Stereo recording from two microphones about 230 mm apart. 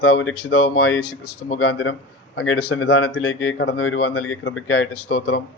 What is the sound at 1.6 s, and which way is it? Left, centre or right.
A man's voice, left.